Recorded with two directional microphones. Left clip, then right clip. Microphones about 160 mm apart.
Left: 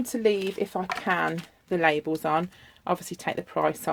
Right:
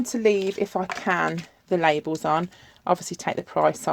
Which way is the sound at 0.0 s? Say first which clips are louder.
Right 3 dB; 35° right (ahead or behind).